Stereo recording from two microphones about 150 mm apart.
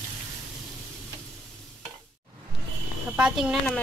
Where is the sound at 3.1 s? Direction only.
5° right (ahead or behind).